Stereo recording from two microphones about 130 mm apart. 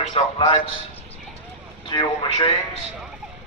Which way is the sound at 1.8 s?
40° left (ahead or behind).